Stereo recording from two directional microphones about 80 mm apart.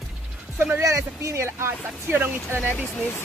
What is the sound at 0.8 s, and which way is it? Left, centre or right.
Speech, right.